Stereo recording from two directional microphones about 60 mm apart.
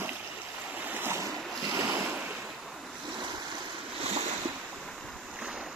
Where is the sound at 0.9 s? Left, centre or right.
Right.